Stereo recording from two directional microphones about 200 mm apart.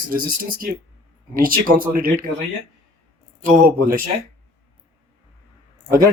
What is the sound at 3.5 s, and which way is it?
Speech, 45° right (ahead or behind).